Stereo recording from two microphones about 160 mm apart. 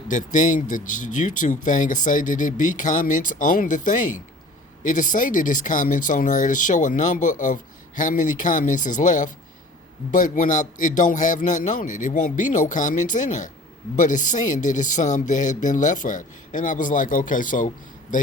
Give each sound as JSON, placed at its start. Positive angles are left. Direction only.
{"t": 0.1, "sound": "speech", "side_deg": 50}